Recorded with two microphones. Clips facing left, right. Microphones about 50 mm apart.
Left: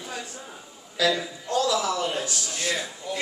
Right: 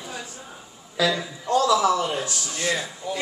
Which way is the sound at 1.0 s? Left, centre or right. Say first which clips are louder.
Right 1 dB; centre.